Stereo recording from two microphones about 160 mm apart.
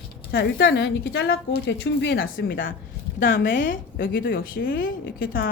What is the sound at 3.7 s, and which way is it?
A woman's voice, 65° left (ahead or behind).